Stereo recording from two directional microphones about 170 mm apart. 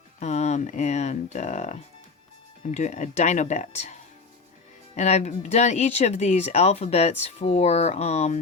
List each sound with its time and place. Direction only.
0.2 s speech: 40° left (ahead or behind)
4.9 s speech: 40° left (ahead or behind)